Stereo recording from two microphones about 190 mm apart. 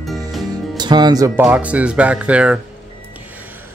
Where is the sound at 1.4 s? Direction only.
5° right (ahead or behind).